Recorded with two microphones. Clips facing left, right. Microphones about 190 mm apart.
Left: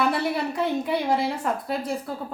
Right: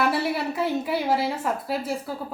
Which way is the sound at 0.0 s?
5° right (ahead or behind).